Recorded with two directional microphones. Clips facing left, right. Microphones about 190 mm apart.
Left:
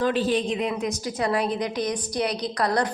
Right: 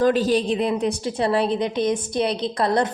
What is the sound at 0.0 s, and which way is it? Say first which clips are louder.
A woman's voice: right 4 dB; 40° right (ahead or behind).